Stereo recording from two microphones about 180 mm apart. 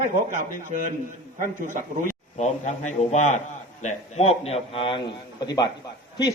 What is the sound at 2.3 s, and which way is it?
A man's voice, 40° left (ahead or behind).